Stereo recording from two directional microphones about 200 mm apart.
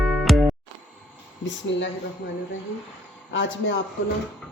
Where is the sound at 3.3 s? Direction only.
70° left (ahead or behind).